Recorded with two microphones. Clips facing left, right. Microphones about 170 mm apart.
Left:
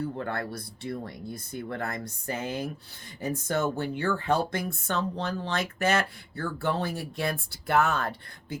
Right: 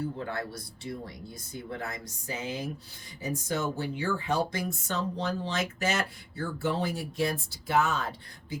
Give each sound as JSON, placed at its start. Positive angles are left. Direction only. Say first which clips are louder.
{"t": 0.2, "sound": "speech", "louder": "left 2 dB", "side_deg": 55}